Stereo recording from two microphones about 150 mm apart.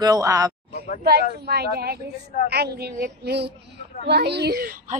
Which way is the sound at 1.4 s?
90° right.